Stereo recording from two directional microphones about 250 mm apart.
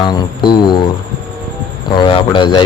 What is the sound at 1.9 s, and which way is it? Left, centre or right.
Speech, centre.